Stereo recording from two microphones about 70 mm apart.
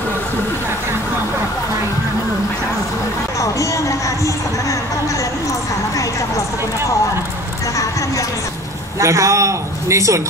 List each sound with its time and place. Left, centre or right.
3.3 s speech: left
7.7 s vehicle: left
9.0 s a man's voice: right